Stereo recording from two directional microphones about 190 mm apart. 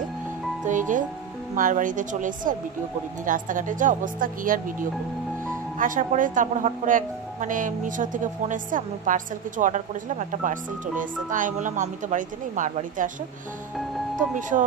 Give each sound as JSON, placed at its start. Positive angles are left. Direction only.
{"t": 0.7, "sound": "music", "side_deg": -40}
{"t": 1.5, "sound": "speech", "side_deg": -45}
{"t": 14.5, "sound": "speech", "side_deg": -35}